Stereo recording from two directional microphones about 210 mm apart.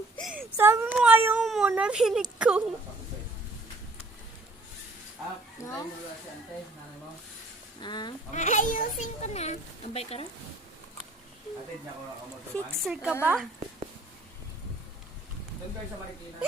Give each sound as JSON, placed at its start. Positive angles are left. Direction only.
{"t": 0.5, "sound": "speech", "side_deg": -10}
{"t": 5.6, "sound": "speech", "side_deg": 15}
{"t": 7.8, "sound": "speech", "side_deg": 20}
{"t": 8.3, "sound": "a child's voice", "side_deg": 35}
{"t": 12.8, "sound": "speech", "side_deg": 0}